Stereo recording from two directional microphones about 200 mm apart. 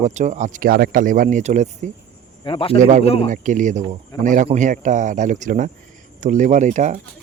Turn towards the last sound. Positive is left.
turn(degrees=-35)  # may be behind; listen again after turning